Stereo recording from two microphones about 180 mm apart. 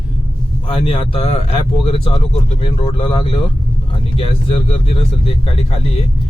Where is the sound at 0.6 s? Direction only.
30° left (ahead or behind).